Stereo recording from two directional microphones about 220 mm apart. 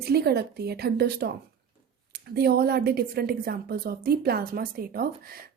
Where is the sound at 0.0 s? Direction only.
45° right (ahead or behind).